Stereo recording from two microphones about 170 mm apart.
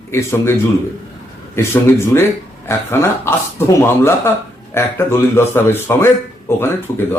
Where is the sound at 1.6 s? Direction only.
15° left (ahead or behind).